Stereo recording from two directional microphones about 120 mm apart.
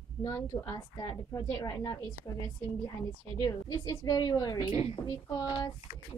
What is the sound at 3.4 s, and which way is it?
A woman's voice, 30° left (ahead or behind).